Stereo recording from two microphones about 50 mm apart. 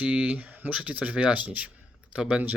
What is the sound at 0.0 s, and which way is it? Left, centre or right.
Speech, right.